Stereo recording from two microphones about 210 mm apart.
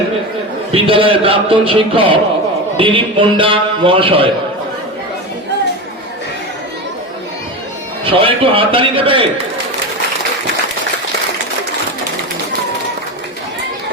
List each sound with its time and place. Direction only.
0.7 s a man's voice: 25° right (ahead or behind)
8.0 s a man's voice: 25° right (ahead or behind)